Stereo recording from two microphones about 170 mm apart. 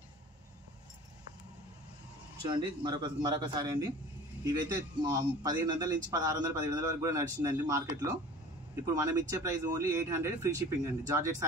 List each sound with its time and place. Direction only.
2.5 s speech: 25° right (ahead or behind)
5.0 s speech: 20° right (ahead or behind)